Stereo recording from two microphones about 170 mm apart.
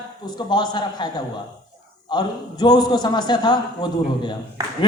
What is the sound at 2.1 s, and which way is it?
A man's voice, 25° left (ahead or behind).